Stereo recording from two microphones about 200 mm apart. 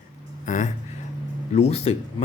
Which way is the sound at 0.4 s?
40° left (ahead or behind).